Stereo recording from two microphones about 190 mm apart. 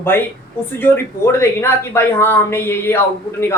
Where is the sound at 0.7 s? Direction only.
10° left (ahead or behind).